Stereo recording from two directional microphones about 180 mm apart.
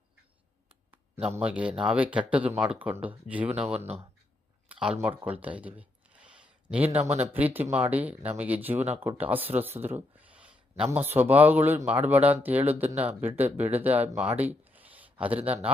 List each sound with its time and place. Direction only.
1.5 s speech: 5° right (ahead or behind)
3.8 s speech: 35° right (ahead or behind)
4.7 s speech: 5° right (ahead or behind)
6.2 s a sound: 5° right (ahead or behind)
7.3 s speech: 10° right (ahead or behind)